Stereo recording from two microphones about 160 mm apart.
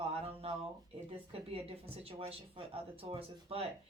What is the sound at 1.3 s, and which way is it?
A woman's voice, 35° right (ahead or behind).